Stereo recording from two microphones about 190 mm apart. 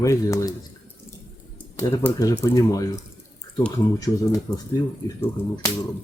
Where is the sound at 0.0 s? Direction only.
15° left (ahead or behind).